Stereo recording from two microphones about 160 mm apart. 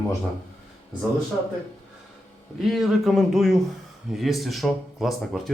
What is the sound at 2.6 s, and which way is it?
Speech, centre (ahead or behind).